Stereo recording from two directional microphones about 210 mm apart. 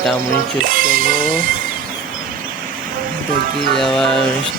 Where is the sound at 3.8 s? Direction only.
Centre (ahead or behind).